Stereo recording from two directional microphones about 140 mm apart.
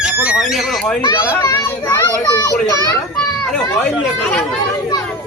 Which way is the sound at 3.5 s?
5° left (ahead or behind).